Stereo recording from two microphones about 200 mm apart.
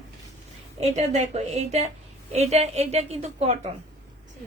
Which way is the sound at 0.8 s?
35° right (ahead or behind).